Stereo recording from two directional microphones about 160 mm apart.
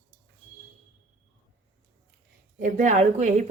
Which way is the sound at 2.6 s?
55° right (ahead or behind).